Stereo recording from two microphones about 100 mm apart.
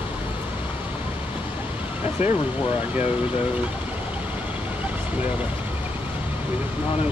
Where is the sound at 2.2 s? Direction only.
90° left.